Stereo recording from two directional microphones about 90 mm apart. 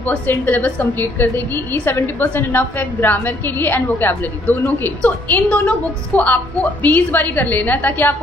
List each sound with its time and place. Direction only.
0.0 s a woman's voice: 20° left (ahead or behind)